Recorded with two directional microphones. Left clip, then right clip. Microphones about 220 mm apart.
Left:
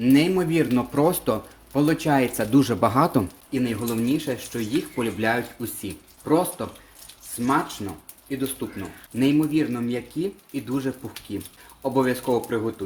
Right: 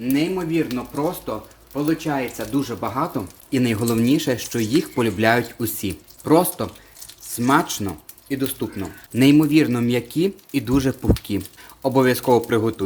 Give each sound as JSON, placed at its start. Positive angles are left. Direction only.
{"t": 0.0, "sound": "speech", "side_deg": 30}
{"t": 3.5, "sound": "speech", "side_deg": -35}